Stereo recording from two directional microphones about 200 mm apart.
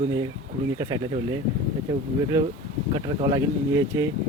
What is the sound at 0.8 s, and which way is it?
Speech, 20° right (ahead or behind).